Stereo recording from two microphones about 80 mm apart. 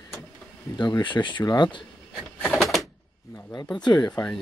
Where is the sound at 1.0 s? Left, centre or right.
Left.